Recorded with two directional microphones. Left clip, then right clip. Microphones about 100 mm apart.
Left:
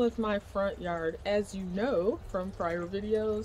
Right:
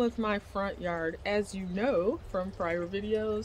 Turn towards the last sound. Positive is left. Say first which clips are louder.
# left 1 dB
turn(degrees=-10)  # may be behind; listen again after turning